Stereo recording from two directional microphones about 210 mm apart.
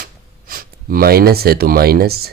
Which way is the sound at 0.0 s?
45° right (ahead or behind).